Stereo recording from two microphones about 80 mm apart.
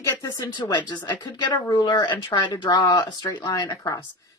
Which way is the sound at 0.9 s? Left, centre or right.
Left.